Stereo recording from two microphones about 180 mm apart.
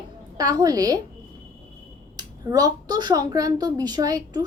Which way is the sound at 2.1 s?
20° right (ahead or behind).